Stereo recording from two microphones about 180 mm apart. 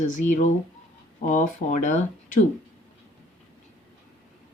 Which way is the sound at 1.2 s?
45° left (ahead or behind).